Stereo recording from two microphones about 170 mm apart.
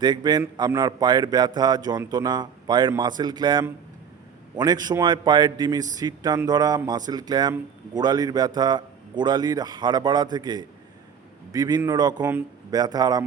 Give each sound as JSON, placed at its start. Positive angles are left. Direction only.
{"t": 0.0, "sound": "a man's voice", "side_deg": -25}
{"t": 12.2, "sound": "speech", "side_deg": -10}
{"t": 12.7, "sound": "a man's voice", "side_deg": -25}